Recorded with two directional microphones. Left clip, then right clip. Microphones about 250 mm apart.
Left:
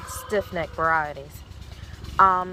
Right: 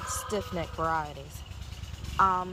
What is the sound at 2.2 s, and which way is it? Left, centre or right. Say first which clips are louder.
Speech: left 7 dB; centre.